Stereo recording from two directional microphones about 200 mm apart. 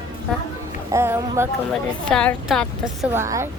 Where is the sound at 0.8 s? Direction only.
10° right (ahead or behind).